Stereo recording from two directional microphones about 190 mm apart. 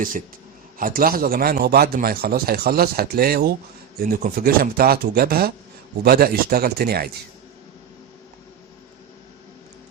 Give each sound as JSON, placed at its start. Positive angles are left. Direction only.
{"t": 0.8, "sound": "speech", "side_deg": -50}